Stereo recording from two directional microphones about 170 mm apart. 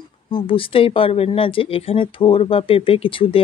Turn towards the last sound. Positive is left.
turn(degrees=30)  # may be behind; listen again after turning